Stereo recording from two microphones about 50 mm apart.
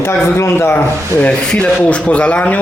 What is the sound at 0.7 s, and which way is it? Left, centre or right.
Speech, left.